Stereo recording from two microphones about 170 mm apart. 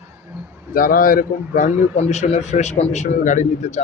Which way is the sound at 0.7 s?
55° left (ahead or behind).